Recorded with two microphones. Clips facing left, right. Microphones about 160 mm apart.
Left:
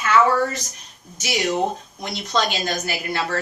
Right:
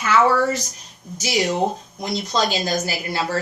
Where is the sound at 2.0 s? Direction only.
35° right (ahead or behind).